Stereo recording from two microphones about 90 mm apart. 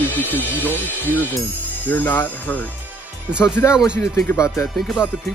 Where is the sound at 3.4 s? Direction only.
30° left (ahead or behind).